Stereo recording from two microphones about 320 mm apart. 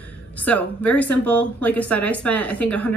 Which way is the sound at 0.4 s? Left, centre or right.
Centre.